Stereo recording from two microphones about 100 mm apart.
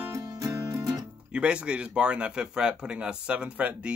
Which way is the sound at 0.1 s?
35° right (ahead or behind).